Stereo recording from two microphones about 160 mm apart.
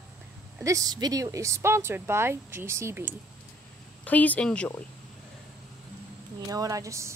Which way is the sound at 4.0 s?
10° left (ahead or behind).